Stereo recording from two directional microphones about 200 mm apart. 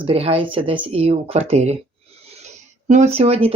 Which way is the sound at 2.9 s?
35° right (ahead or behind).